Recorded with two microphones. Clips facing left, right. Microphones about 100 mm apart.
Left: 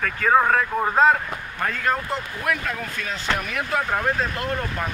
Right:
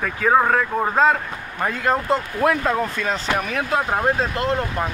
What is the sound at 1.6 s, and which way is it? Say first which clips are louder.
Speech: right 3 dB; 20° right (ahead or behind).